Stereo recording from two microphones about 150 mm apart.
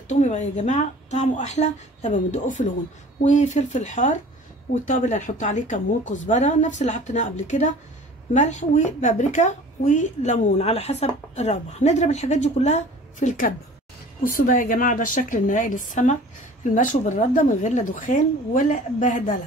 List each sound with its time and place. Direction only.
0.1 s a woman's voice: 50° left (ahead or behind)
14.2 s a woman's voice: 70° left (ahead or behind)